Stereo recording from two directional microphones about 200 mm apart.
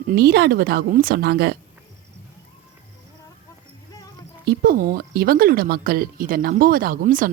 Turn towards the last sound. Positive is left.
turn(degrees=-45)  # may be behind; listen again after turning